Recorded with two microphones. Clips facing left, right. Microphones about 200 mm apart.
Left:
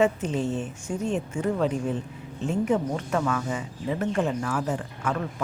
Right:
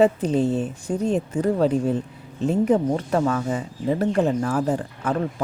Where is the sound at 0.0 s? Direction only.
35° right (ahead or behind).